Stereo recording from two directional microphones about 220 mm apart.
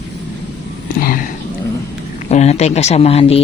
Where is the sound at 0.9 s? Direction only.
40° left (ahead or behind).